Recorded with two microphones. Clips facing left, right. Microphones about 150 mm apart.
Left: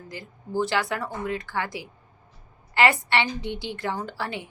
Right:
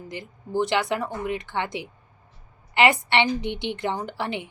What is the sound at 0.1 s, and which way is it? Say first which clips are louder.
A woman's voice: right 2 dB; 20° right (ahead or behind).